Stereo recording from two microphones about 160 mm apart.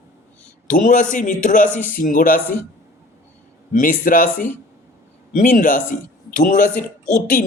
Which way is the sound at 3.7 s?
60° left (ahead or behind).